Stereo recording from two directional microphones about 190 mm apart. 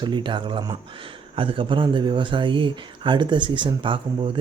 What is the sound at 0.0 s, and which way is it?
Speech, 25° right (ahead or behind).